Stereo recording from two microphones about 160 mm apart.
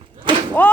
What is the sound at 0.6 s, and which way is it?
Speech, 10° left (ahead or behind).